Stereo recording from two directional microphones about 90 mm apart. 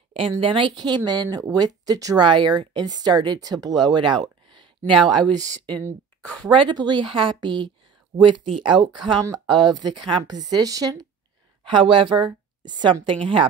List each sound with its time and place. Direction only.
0.4 s speech: 70° right (ahead or behind); by 2.1 s 40° right (ahead or behind)
2.1 s speech: 60° right (ahead or behind)
6.5 s speech: 60° right (ahead or behind)
10.3 s speech: 45° right (ahead or behind)
11.6 s a woman's voice: 65° right (ahead or behind)